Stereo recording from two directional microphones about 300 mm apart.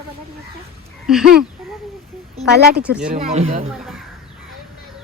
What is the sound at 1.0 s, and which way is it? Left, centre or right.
Speech, centre.